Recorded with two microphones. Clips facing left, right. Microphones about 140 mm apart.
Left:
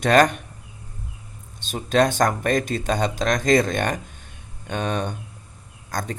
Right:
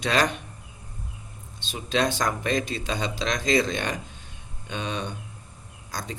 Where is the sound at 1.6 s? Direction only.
50° left (ahead or behind).